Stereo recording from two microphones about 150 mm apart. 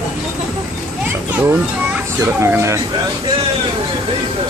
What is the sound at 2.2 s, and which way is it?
Speech, 20° right (ahead or behind).